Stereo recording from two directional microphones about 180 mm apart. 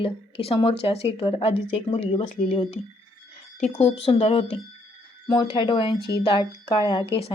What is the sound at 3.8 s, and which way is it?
A woman's voice, 35° left (ahead or behind).